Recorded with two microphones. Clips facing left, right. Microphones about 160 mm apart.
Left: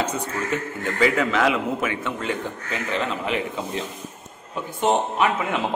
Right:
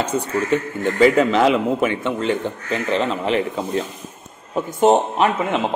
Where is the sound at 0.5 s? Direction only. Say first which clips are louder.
Right 6 dB; 30° right (ahead or behind).